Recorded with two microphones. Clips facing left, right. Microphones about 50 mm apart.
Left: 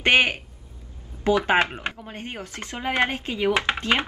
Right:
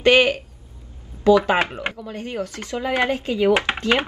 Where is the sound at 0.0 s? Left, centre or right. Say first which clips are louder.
Right 4 dB; left.